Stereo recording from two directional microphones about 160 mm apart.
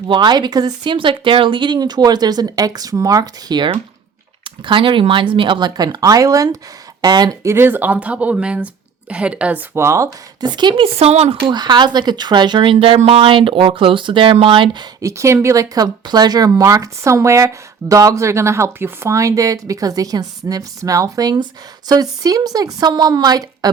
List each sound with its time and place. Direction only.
0.1 s speech: 30° right (ahead or behind)